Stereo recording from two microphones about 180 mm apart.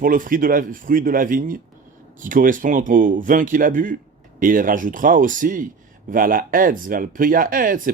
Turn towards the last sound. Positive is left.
turn(degrees=-50)  # may be behind; listen again after turning